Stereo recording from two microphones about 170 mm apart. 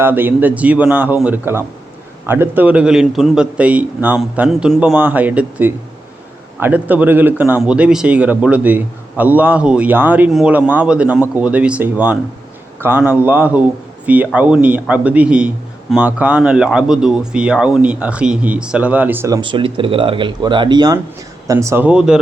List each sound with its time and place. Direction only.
0.0 s a man's voice: 10° right (ahead or behind)
19.4 s a man's voice: 30° right (ahead or behind); by 22.2 s 5° right (ahead or behind)